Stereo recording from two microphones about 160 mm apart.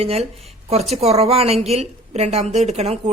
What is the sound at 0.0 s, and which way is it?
A woman's voice, 40° right (ahead or behind).